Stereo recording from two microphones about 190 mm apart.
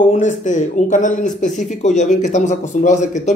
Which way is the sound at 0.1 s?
40° left (ahead or behind).